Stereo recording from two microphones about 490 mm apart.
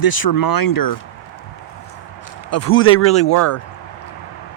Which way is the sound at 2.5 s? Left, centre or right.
Left.